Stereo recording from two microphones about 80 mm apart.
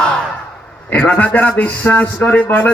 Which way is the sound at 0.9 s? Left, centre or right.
Centre.